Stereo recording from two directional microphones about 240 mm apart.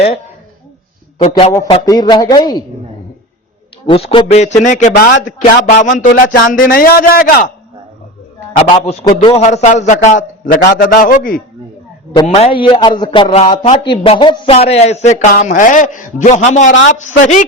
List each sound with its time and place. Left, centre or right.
1.2 s speech: left
3.8 s a man's voice: left
8.7 s a man's voice: left